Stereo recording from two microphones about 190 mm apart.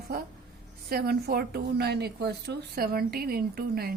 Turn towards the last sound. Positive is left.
turn(degrees=-55)  # may be behind; listen again after turning